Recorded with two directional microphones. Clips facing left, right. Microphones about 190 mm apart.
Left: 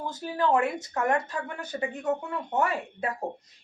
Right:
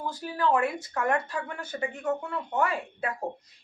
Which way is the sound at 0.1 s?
20° left (ahead or behind).